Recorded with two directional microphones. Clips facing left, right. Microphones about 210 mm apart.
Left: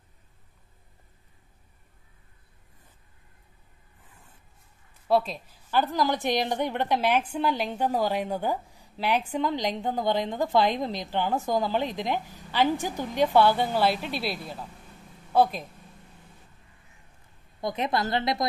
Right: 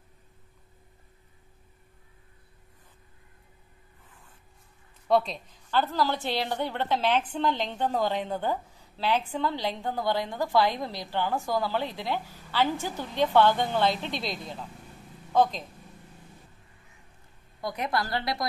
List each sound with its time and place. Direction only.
5.0 s a woman's voice: 5° left (ahead or behind)
17.6 s a woman's voice: 20° left (ahead or behind)